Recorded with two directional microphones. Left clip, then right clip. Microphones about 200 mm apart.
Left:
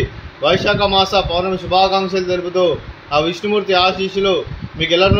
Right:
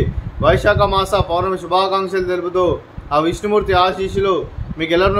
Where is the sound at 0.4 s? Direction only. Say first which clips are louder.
Right 1 dB; 20° right (ahead or behind).